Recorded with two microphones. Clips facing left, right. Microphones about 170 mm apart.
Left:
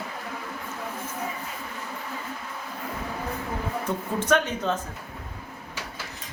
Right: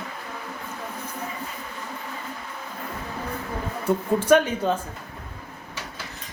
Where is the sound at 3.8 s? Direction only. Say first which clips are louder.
Right 8 dB; 10° right (ahead or behind).